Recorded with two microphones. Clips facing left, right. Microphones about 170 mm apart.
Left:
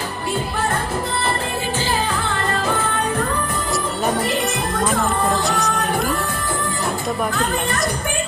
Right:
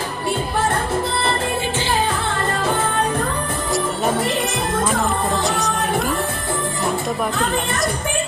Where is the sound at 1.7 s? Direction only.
40° left (ahead or behind).